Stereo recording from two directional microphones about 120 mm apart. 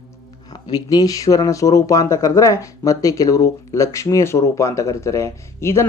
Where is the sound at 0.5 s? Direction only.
35° left (ahead or behind).